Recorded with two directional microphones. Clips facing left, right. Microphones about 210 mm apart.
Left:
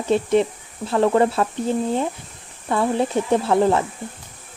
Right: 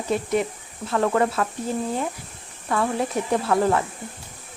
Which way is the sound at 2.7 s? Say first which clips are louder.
Left 4 dB; 25° left (ahead or behind).